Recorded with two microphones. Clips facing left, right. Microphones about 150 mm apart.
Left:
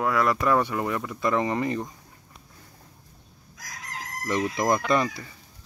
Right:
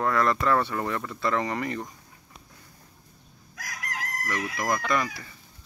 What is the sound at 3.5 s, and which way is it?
Crowing, 70° right (ahead or behind).